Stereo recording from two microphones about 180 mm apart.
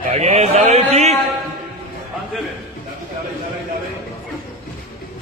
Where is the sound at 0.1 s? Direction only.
40° right (ahead or behind).